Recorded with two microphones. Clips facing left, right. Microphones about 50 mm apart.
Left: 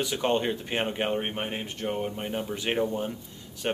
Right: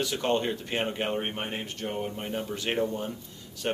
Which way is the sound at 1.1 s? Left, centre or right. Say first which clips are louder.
Left 1 dB; centre.